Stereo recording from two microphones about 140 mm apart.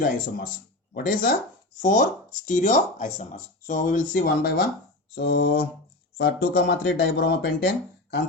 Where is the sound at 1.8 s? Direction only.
70° left (ahead or behind).